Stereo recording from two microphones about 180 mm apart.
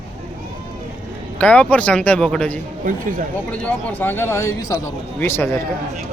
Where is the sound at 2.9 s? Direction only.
50° right (ahead or behind).